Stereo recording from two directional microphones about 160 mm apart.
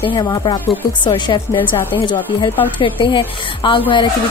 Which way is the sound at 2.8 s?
30° left (ahead or behind).